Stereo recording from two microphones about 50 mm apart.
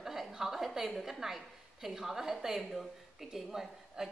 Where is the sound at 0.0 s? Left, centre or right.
Centre.